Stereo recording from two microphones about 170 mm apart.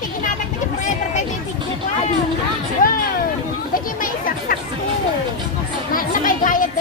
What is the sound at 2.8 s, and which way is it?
Music, 50° left (ahead or behind).